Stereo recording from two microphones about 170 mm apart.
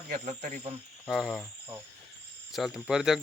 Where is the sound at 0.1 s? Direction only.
45° right (ahead or behind).